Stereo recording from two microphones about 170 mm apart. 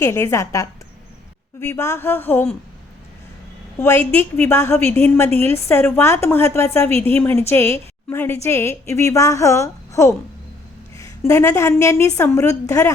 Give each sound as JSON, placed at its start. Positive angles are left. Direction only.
{"t": 0.0, "sound": "a woman's voice", "side_deg": 15}
{"t": 3.8, "sound": "a woman's voice", "side_deg": 15}